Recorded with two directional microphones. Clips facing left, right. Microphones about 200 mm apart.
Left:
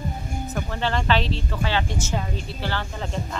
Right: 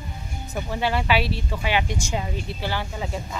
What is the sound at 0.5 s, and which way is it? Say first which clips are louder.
Speech: right 2 dB; 10° right (ahead or behind).